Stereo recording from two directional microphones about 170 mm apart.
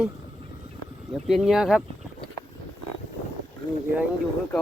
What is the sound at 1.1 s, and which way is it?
Speech, centre (ahead or behind).